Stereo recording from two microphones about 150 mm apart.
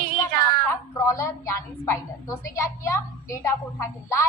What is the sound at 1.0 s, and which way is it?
A woman's voice, 20° left (ahead or behind).